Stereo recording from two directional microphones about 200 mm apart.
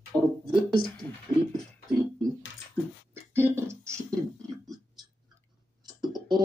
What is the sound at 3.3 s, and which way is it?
Beatboxing, 15° right (ahead or behind).